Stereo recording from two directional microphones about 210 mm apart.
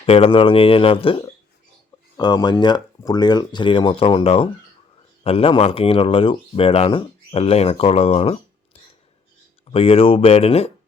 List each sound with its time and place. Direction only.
0.0 s speech: 25° left (ahead or behind)